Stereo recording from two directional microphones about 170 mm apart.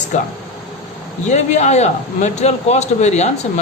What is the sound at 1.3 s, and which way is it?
A man's voice, 40° left (ahead or behind).